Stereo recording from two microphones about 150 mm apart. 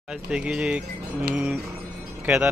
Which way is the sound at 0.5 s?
5° right (ahead or behind).